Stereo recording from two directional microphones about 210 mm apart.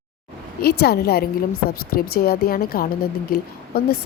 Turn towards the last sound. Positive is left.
turn(degrees=45)  # may be behind; listen again after turning